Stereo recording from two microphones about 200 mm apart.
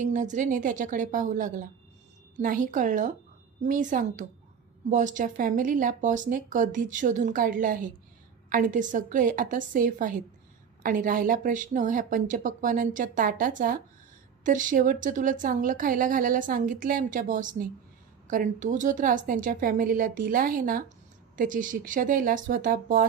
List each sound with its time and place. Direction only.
0.0 s a woman's voice: 40° right (ahead or behind)